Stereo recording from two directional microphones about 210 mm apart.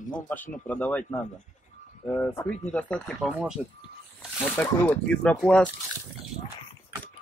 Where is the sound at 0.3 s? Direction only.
10° left (ahead or behind).